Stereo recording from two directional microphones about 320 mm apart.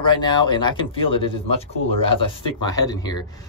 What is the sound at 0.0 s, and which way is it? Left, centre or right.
Speech, centre.